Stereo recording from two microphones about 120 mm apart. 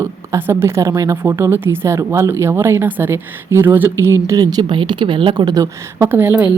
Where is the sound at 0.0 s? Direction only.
20° right (ahead or behind); by 5.6 s 35° right (ahead or behind).